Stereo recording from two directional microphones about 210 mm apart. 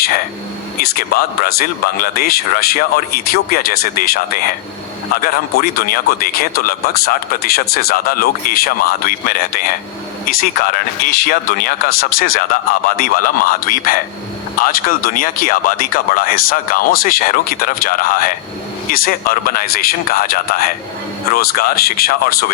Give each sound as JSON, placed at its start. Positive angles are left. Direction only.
{"t": 0.8, "sound": "speech", "side_deg": 45}